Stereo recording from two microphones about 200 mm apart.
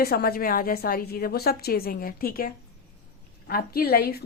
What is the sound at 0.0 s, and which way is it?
A woman's voice, 50° left (ahead or behind).